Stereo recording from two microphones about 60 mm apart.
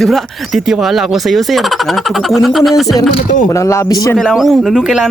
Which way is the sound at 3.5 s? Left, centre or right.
Left.